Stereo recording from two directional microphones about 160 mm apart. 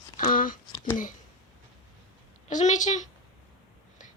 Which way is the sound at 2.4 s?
50° left (ahead or behind).